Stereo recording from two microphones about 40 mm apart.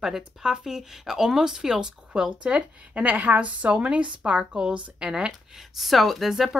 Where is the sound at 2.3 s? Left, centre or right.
Right.